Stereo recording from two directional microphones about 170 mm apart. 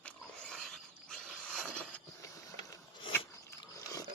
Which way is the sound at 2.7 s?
20° left (ahead or behind).